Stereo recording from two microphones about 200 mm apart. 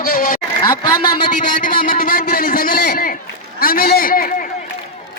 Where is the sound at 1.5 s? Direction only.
45° left (ahead or behind).